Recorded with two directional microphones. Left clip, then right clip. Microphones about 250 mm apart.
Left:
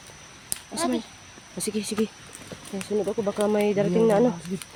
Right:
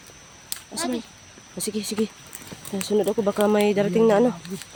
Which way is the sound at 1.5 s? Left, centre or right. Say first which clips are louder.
Right 1 dB; centre.